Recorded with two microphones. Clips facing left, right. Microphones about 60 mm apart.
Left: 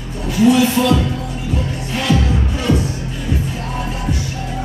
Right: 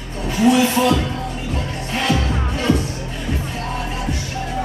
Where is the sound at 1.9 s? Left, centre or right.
Centre.